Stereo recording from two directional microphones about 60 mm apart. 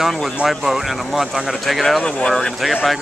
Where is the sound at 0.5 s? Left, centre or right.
Centre.